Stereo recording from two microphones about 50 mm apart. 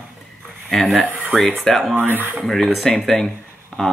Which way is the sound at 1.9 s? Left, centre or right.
Right.